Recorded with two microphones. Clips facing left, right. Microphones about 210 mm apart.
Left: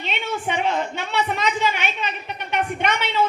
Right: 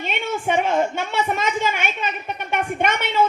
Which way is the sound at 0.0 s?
50° right (ahead or behind).